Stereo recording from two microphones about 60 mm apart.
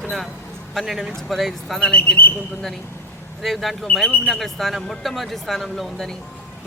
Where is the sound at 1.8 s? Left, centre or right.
Centre.